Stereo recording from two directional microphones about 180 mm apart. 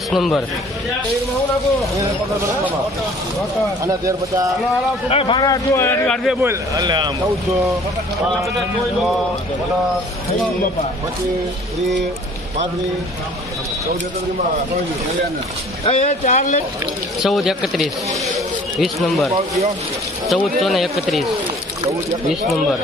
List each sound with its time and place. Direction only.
0.1 s a man's voice: centre (ahead or behind)
5.1 s a man's voice: 30° left (ahead or behind); by 6.1 s 10° left (ahead or behind)
6.4 s a man's voice: 15° right (ahead or behind)
15.8 s speech: 35° left (ahead or behind)
17.2 s speech: centre (ahead or behind)
22.3 s speech: centre (ahead or behind)